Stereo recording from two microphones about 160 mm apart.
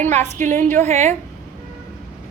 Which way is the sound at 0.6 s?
15° left (ahead or behind).